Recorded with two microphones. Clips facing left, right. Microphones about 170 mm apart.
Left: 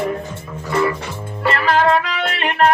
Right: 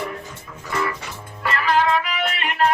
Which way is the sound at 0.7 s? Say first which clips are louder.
Left 7 dB; 30° left (ahead or behind).